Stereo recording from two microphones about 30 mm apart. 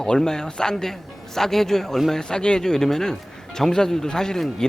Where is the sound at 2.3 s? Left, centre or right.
Left.